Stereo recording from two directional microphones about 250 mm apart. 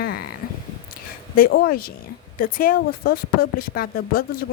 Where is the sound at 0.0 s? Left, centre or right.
Left.